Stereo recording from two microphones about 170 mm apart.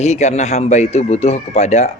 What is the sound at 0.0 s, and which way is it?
Speech, 40° left (ahead or behind).